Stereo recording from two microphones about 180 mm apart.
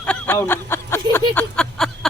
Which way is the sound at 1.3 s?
5° left (ahead or behind).